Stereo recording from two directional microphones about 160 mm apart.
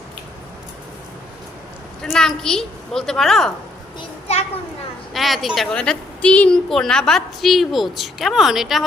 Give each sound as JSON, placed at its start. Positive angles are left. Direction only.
{"t": 2.0, "sound": "a woman's voice", "side_deg": 5}
{"t": 4.3, "sound": "children playing", "side_deg": 40}
{"t": 5.1, "sound": "a woman's voice", "side_deg": 0}